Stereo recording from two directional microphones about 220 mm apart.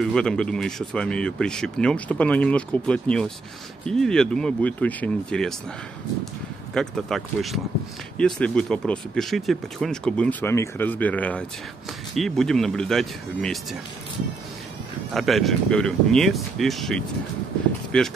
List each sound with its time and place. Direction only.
0.0 s speech: 5° left (ahead or behind)
6.7 s speech: centre (ahead or behind)
15.1 s speech: centre (ahead or behind)